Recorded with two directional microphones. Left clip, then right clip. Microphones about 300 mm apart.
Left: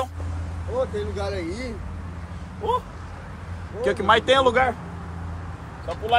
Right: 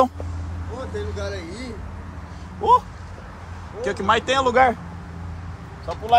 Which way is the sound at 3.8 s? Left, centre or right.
Centre.